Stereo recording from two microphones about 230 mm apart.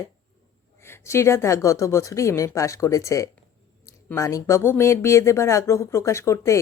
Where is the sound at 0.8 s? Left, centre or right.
Centre.